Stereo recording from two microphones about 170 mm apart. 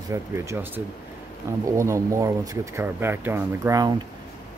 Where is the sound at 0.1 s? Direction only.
15° right (ahead or behind).